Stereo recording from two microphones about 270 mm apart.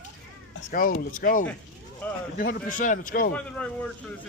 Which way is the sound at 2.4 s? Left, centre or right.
Left.